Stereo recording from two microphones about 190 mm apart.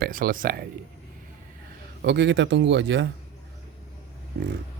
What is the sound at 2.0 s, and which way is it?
A man's voice, 65° right (ahead or behind).